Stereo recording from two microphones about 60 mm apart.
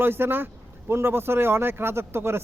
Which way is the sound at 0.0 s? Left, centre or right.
Right.